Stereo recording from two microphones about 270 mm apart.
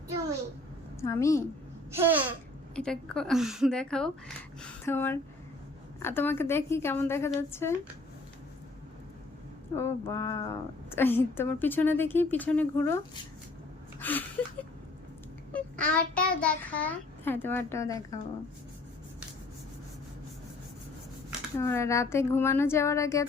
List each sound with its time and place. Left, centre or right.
1.0 s a woman's voice: centre
2.0 s babbling: centre
2.7 s a woman's voice: centre
9.7 s a woman's voice: centre
14.0 s a sound: centre
15.5 s a woman's voice: centre
21.6 s a woman's voice: centre